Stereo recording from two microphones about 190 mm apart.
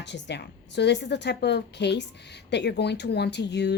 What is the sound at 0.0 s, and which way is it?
Speech, 65° left (ahead or behind).